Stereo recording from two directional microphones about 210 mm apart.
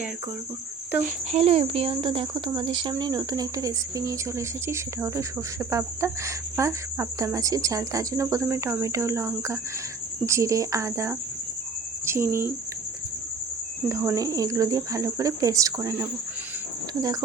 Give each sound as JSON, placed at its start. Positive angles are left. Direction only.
{"t": 1.0, "sound": "speech", "side_deg": -30}
{"t": 13.8, "sound": "speech", "side_deg": -15}